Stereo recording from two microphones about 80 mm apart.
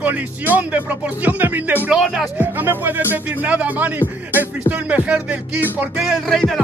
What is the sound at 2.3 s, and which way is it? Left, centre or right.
Speech, right.